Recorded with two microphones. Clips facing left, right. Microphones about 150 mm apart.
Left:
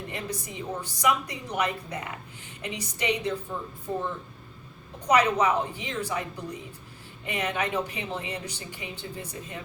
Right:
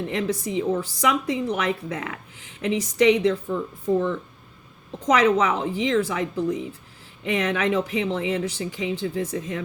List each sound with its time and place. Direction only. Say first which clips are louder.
0.1 s a woman's voice: right 10 dB; 90° right
5.0 s a woman's voice: right 3 dB; 90° right